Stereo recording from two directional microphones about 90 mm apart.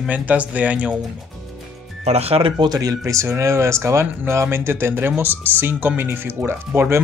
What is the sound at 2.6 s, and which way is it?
Speech, 45° right (ahead or behind).